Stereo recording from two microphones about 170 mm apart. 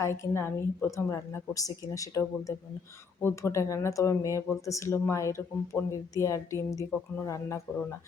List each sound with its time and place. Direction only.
0.0 s speech: 15° left (ahead or behind)